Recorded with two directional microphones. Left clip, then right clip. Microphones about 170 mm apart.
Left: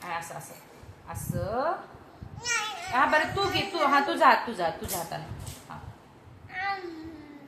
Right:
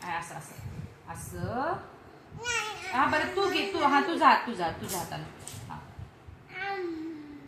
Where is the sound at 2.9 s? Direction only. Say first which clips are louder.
Left 3 dB; 25° left (ahead or behind).